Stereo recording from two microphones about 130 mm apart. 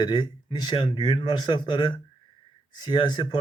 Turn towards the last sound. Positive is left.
turn(degrees=35)  # may be behind; listen again after turning